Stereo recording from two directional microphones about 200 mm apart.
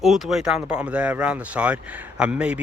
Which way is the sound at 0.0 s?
Centre (ahead or behind).